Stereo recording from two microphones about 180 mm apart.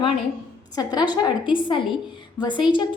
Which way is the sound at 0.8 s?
20° left (ahead or behind).